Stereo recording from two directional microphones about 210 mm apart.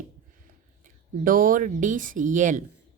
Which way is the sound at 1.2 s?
40° right (ahead or behind).